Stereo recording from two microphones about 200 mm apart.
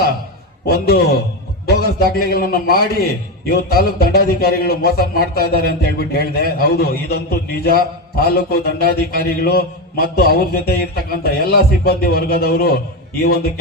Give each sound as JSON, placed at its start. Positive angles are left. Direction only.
{"t": 0.7, "sound": "a man's voice", "side_deg": 50}